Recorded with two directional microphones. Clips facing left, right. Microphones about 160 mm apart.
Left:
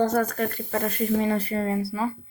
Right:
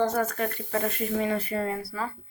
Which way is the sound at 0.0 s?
40° left (ahead or behind).